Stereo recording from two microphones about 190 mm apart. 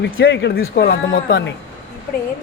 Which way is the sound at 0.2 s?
65° left (ahead or behind).